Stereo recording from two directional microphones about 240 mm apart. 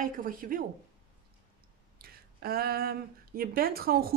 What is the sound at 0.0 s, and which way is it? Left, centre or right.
Speech, right.